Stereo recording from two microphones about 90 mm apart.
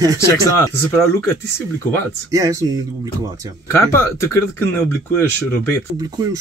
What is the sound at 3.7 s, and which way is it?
Speech, 25° left (ahead or behind).